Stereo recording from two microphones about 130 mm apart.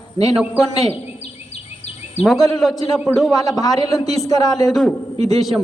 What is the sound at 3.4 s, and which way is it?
A man's voice, 30° left (ahead or behind).